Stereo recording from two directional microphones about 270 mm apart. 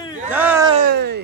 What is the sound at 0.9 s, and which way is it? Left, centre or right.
Speech, right.